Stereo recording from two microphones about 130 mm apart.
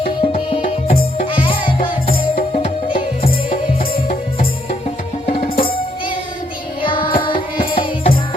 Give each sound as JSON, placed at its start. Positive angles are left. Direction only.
{"t": 0.2, "sound": "music", "side_deg": 45}
{"t": 2.3, "sound": "music", "side_deg": 70}
{"t": 5.2, "sound": "music", "side_deg": 55}